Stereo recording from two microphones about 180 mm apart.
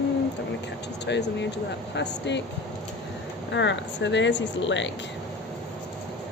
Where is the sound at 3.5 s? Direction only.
80° left.